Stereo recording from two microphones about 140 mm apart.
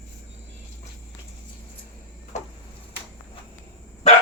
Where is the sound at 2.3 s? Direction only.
55° left (ahead or behind).